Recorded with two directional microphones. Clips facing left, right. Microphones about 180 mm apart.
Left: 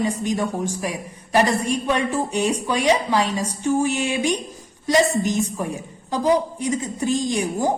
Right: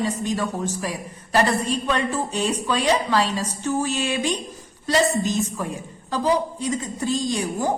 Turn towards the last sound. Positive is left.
turn(degrees=15)  # may be behind; listen again after turning